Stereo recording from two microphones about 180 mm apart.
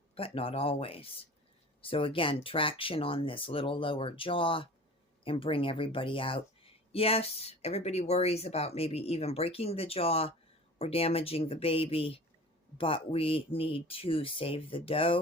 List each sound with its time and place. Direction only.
0.1 s speech: 30° left (ahead or behind)